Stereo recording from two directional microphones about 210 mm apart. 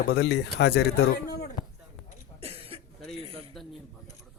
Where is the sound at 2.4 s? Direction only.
25° right (ahead or behind).